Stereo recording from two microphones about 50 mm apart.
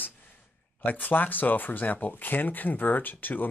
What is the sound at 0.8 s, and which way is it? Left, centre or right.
Speech, left.